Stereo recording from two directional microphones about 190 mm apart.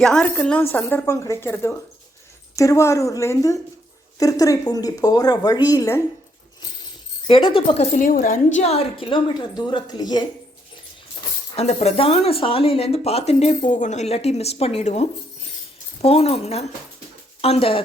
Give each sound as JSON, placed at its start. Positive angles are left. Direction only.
{"t": 0.0, "sound": "a woman's voice", "side_deg": 5}
{"t": 7.3, "sound": "speech", "side_deg": 30}
{"t": 8.5, "sound": "a woman's voice", "side_deg": 35}
{"t": 11.5, "sound": "a woman's voice", "side_deg": 35}